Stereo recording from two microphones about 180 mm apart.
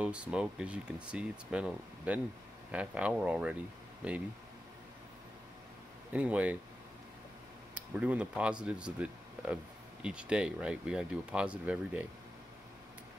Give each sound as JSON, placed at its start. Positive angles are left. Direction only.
{"t": 0.0, "sound": "speech", "side_deg": -5}
{"t": 6.1, "sound": "speech", "side_deg": -5}
{"t": 7.9, "sound": "speech", "side_deg": -5}